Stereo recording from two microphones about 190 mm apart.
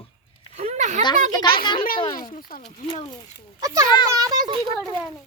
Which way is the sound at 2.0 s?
25° left (ahead or behind).